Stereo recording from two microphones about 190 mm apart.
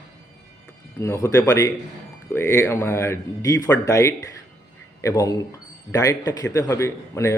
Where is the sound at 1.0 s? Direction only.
15° left (ahead or behind).